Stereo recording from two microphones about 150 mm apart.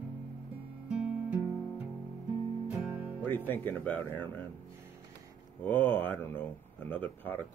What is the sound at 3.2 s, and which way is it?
Speech, 15° left (ahead or behind).